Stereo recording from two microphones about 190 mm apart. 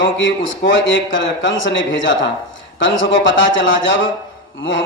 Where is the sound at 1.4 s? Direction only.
80° left.